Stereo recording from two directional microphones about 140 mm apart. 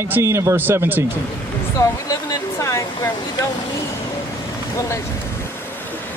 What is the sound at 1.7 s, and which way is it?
Speech, 25° left (ahead or behind).